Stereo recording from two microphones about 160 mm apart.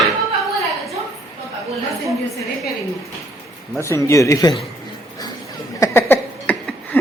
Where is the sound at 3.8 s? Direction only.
20° left (ahead or behind).